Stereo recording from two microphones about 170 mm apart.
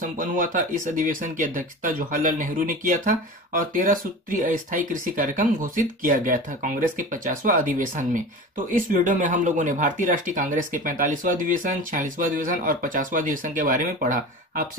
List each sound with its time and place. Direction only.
0.0 s speech: 50° right (ahead or behind)